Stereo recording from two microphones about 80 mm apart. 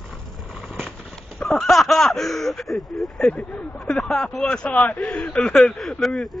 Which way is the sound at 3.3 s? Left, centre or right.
Centre.